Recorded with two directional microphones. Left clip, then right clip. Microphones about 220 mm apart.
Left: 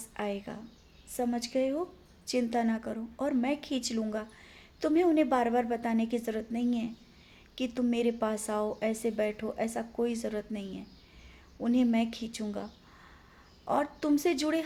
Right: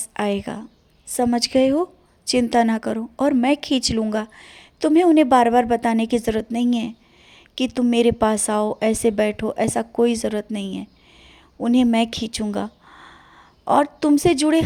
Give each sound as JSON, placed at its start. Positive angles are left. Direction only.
{"t": 0.0, "sound": "a woman's voice", "side_deg": -45}